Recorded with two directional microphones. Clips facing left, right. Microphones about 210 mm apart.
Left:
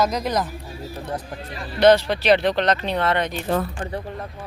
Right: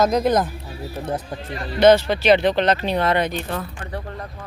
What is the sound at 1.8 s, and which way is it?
Speech, centre (ahead or behind).